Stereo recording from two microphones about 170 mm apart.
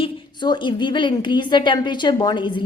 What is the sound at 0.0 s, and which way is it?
A woman's voice, 25° left (ahead or behind).